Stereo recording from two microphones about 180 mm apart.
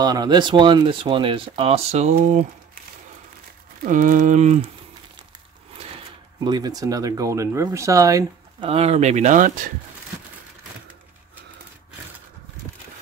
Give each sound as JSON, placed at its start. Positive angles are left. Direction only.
{"t": 0.0, "sound": "speech", "side_deg": -25}
{"t": 3.8, "sound": "speech", "side_deg": -45}
{"t": 6.4, "sound": "speech", "side_deg": -20}
{"t": 8.6, "sound": "speech", "side_deg": -35}